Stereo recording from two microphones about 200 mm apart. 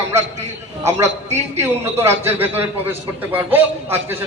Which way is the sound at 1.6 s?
10° right (ahead or behind).